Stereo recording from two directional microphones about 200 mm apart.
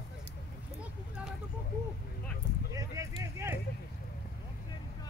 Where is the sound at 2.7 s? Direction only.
15° right (ahead or behind).